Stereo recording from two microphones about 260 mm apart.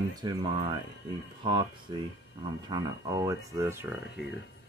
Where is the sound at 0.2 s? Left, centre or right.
Centre.